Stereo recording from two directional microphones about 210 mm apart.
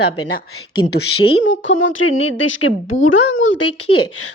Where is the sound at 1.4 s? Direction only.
65° left (ahead or behind).